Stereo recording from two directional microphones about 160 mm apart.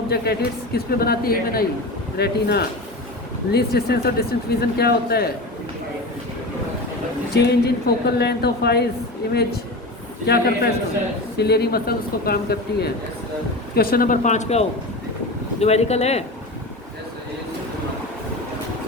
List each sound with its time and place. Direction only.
0.1 s speech: 80° left
2.1 s a woman's voice: 90° left
7.3 s a woman's voice: 90° left
10.2 s speech: 80° left
11.3 s speech: 90° left; by 14.6 s 45° left (ahead or behind)
15.6 s speech: 40° left (ahead or behind)